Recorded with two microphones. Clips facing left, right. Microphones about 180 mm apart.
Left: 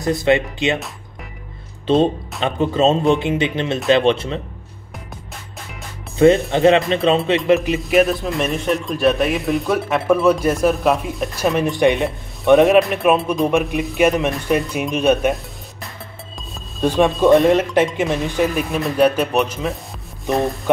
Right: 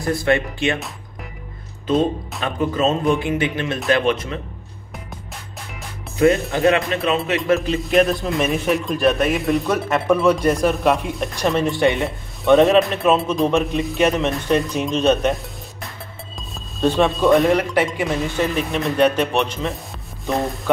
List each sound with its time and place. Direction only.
0.0 s speech: 20° left (ahead or behind)
2.4 s speech: 25° left (ahead or behind)
6.1 s speech: 30° left (ahead or behind)
7.9 s speech: centre (ahead or behind)
11.5 s speech: 20° left (ahead or behind)
16.8 s speech: 10° left (ahead or behind)
18.7 s speech: centre (ahead or behind)